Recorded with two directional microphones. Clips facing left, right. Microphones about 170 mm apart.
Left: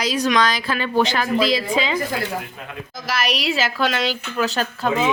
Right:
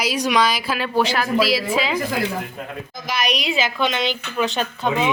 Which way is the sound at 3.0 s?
5° left (ahead or behind).